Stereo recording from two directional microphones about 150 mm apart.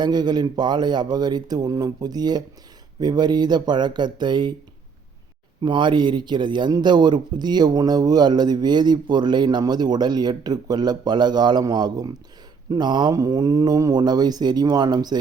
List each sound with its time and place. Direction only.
0.0 s speech: 30° right (ahead or behind)
5.6 s speech: 30° right (ahead or behind)